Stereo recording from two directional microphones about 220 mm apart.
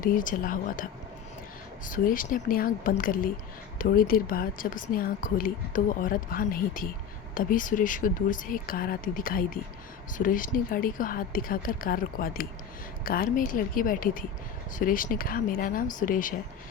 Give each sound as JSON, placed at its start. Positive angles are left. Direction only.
{"t": 0.0, "sound": "a woman's voice", "side_deg": 40}
{"t": 1.9, "sound": "a woman's voice", "side_deg": 40}